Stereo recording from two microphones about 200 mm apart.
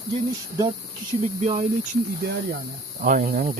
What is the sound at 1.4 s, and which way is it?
Speech, 35° right (ahead or behind).